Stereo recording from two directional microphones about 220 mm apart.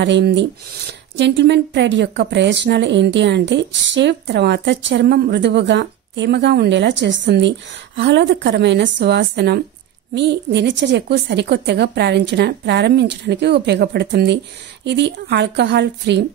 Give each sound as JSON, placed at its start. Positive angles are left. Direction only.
{"t": 0.0, "sound": "speech", "side_deg": -50}